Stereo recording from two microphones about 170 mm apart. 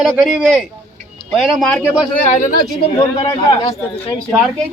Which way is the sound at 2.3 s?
40° left (ahead or behind).